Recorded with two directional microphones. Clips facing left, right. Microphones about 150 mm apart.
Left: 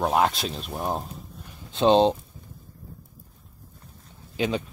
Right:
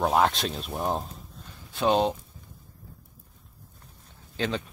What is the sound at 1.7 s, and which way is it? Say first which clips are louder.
Speech: left 5 dB; 25° left (ahead or behind).